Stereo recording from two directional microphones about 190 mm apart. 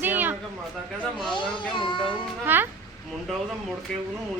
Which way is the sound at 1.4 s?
25° left (ahead or behind).